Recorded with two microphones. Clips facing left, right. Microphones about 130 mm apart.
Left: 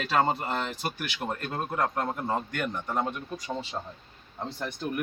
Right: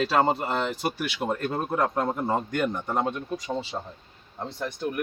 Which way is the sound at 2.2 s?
35° right (ahead or behind).